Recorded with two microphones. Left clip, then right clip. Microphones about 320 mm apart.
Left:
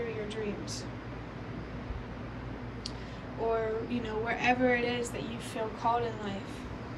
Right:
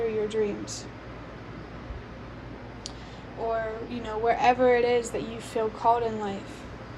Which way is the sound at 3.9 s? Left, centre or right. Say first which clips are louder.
Right 7 dB; centre.